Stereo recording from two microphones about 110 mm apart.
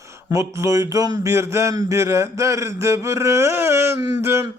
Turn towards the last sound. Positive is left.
turn(degrees=-25)  # may be behind; listen again after turning